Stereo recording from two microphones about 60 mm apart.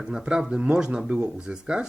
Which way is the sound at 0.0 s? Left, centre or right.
Centre.